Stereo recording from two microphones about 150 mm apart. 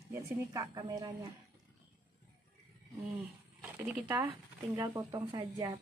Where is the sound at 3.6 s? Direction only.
10° right (ahead or behind).